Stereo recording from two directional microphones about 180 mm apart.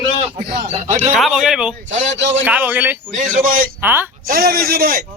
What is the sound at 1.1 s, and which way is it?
Speech, centre (ahead or behind).